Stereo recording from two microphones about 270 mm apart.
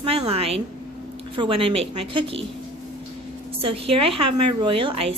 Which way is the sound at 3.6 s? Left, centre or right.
Right.